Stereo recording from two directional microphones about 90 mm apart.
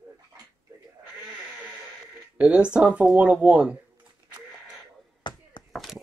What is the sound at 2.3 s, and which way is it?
Speech, 10° right (ahead or behind).